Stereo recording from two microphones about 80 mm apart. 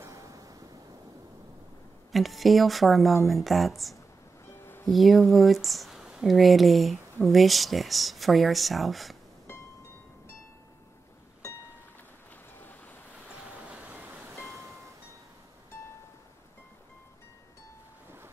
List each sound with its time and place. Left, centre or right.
0.0 s waves: right
2.1 s speech: centre
4.5 s music: left
4.8 s speech: centre
12.5 s waves: left
13.6 s vehicle: centre